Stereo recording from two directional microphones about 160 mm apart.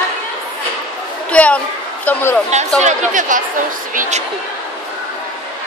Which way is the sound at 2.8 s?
55° right (ahead or behind).